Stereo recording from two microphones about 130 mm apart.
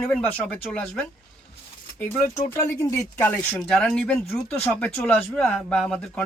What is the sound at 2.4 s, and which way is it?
Speech, 25° left (ahead or behind).